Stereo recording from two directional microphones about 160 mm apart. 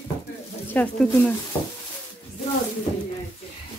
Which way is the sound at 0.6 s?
10° left (ahead or behind).